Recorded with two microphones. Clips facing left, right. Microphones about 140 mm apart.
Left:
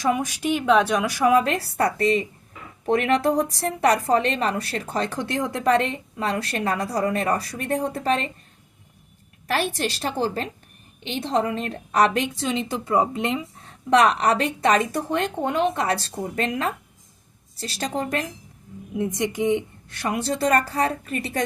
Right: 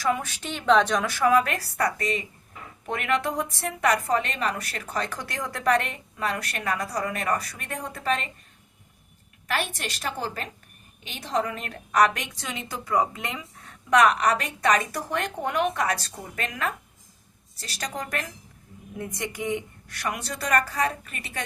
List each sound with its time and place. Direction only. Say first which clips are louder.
0.0 s a woman's voice: left 4 dB; 15° left (ahead or behind); by 8.3 s 30° left (ahead or behind)
9.5 s a woman's voice: left 5 dB; 35° left (ahead or behind)